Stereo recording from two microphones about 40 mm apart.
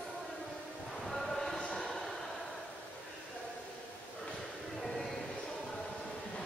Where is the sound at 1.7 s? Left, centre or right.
Centre.